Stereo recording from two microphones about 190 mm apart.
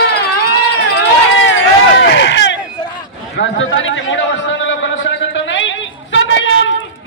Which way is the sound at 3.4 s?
90° left.